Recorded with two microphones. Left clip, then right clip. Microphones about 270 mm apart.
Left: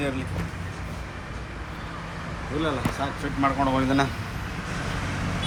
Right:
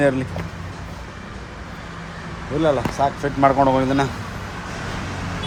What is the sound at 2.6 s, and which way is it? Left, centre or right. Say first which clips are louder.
Speech: right 10 dB; right.